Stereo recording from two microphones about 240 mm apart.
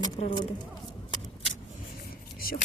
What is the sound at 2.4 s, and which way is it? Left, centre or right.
Whispering, left.